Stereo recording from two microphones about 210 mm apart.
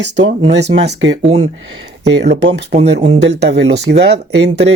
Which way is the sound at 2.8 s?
55° right (ahead or behind).